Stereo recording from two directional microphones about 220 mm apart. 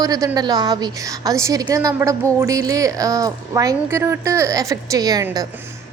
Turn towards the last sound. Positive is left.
turn(degrees=-15)  # may be behind; listen again after turning